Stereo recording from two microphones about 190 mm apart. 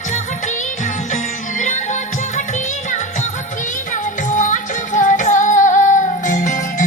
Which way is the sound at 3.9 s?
40° left (ahead or behind).